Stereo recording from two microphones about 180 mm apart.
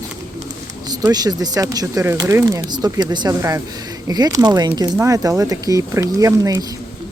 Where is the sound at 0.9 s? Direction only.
20° right (ahead or behind).